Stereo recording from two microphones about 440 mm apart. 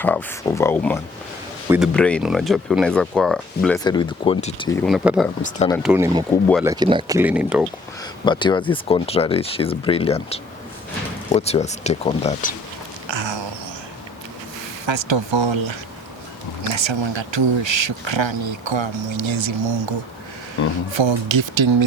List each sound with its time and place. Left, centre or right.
0.0 s speech: centre
5.4 s speech: centre
5.7 s speech: centre
8.2 s speech: centre
13.1 s a sound: right
14.8 s speech: right
20.9 s speech: right